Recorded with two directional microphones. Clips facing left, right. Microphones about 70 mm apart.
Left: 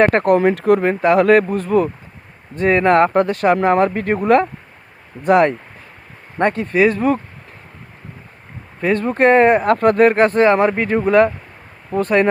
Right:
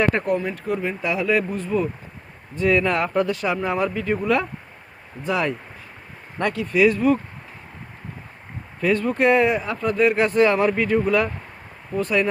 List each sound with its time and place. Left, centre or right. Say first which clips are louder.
0.0 s speech: left 8 dB; left
0.8 s speech: left 10 dB; left
2.6 s speech: left 7 dB; left
6.4 s speech: left 4 dB; left
8.9 s speech: left 5 dB; left